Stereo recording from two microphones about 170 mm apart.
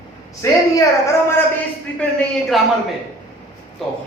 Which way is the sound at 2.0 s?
5° left (ahead or behind).